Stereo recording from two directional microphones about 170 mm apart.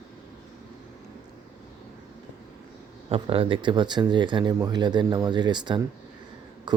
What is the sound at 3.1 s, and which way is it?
Speech, 30° right (ahead or behind).